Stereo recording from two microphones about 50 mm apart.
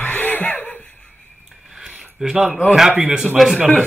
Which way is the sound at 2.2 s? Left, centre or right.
Centre.